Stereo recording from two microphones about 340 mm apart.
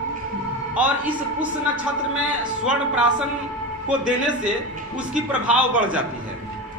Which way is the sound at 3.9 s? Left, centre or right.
Centre.